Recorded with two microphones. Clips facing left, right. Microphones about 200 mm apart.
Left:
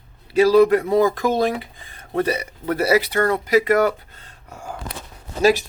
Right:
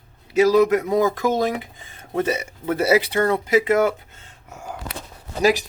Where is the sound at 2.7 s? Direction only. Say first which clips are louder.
Even; 25° right (ahead or behind).